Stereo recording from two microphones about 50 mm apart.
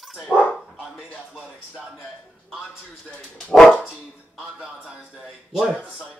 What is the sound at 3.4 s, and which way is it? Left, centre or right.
Speech, centre.